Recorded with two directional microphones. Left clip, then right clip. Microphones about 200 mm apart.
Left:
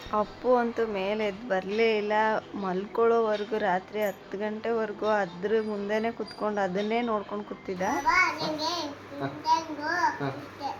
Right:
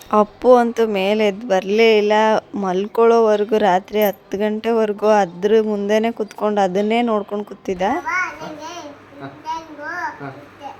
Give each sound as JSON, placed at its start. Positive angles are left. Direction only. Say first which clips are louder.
{"t": 0.1, "sound": "music", "louder": "right 12 dB", "side_deg": -50}